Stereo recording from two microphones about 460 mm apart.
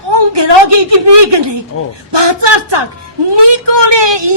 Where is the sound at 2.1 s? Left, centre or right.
Right.